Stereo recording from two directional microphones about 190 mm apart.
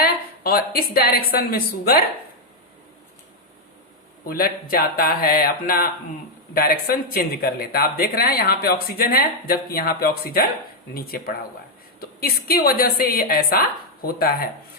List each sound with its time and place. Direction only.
0.0 s a woman's voice: 50° left (ahead or behind)
4.3 s speech: 50° left (ahead or behind)